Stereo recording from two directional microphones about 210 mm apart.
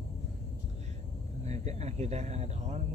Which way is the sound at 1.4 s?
30° right (ahead or behind).